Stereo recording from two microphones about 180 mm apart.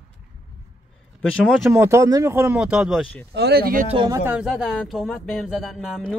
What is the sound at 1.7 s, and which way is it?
Speech, 15° right (ahead or behind).